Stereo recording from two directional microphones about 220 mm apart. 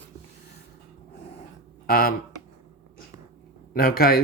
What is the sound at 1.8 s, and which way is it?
Speech, 45° left (ahead or behind).